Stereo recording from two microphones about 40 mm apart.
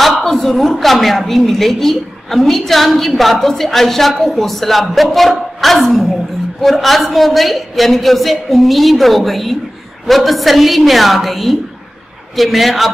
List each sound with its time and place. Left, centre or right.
0.2 s a woman's voice: centre